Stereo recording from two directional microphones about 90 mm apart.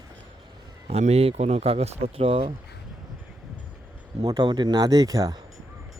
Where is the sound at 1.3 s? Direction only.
90° right.